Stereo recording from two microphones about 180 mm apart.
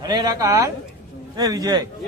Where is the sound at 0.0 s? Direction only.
25° right (ahead or behind).